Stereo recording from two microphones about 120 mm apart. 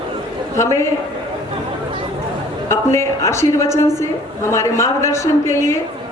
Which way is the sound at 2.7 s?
25° left (ahead or behind).